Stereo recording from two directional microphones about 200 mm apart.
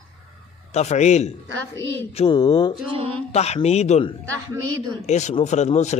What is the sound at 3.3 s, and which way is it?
Speech, 35° left (ahead or behind).